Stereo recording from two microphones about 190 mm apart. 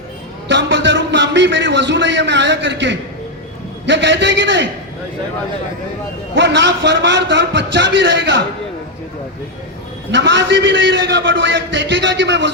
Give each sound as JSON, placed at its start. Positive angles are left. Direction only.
{"t": 0.4, "sound": "a man's voice", "side_deg": -70}
{"t": 6.3, "sound": "a man's voice", "side_deg": -70}
{"t": 10.1, "sound": "a man's voice", "side_deg": -70}